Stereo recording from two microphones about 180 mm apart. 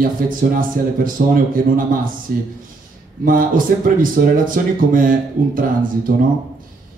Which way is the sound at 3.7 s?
55° right (ahead or behind).